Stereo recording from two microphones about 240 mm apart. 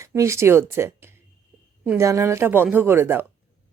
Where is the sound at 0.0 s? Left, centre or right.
Centre.